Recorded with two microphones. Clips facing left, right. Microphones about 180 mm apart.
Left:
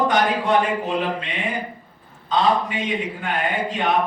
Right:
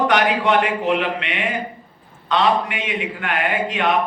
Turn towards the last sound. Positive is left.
turn(degrees=-75)  # may be behind; listen again after turning